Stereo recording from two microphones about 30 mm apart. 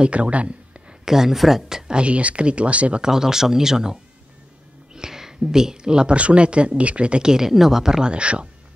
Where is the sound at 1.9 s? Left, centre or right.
Right.